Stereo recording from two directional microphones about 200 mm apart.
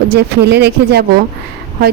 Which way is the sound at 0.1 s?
55° right (ahead or behind).